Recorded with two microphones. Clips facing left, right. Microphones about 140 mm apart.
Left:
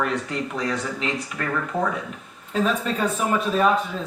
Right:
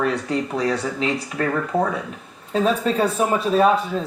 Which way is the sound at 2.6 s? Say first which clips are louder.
Right 4 dB; 35° right (ahead or behind).